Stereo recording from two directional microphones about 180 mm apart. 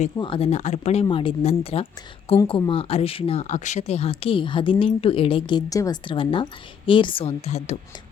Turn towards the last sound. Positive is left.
turn(degrees=35)  # may be behind; listen again after turning